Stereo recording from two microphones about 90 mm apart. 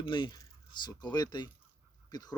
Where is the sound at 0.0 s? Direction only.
60° left (ahead or behind).